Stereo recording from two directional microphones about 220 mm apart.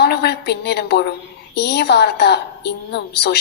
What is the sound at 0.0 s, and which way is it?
A woman's voice, 50° left (ahead or behind).